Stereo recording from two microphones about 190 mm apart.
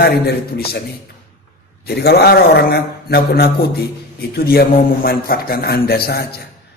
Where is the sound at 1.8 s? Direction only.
60° left (ahead or behind).